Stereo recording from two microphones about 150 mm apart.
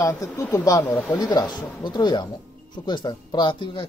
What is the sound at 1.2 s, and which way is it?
Speech, 30° left (ahead or behind).